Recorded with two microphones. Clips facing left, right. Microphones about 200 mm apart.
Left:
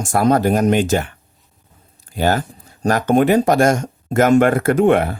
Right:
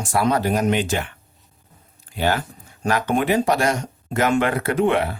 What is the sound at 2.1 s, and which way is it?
Speech, 40° left (ahead or behind).